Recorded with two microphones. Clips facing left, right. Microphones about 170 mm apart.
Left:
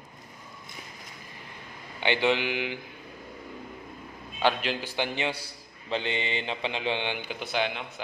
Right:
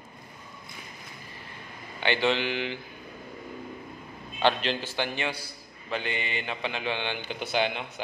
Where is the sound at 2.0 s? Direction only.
15° left (ahead or behind).